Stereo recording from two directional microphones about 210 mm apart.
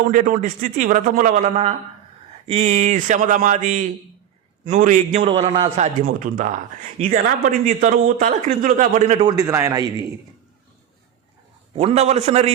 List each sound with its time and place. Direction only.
0.1 s a man's voice: 40° right (ahead or behind)
9.2 s a man's voice: 15° right (ahead or behind)
11.7 s a man's voice: 30° right (ahead or behind)